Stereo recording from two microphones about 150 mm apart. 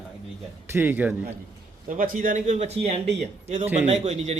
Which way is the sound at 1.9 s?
65° right (ahead or behind).